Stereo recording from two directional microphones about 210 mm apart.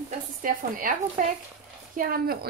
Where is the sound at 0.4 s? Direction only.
40° right (ahead or behind).